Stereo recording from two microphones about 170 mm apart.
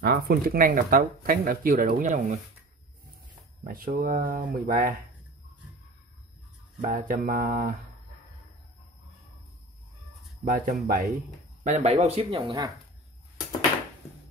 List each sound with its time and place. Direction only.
0.0 s speech: 60° right (ahead or behind)
3.6 s speech: 60° right (ahead or behind)
6.8 s speech: 55° right (ahead or behind)
10.4 s speech: 55° right (ahead or behind)
11.6 s speech: 45° right (ahead or behind); by 12.7 s 25° right (ahead or behind)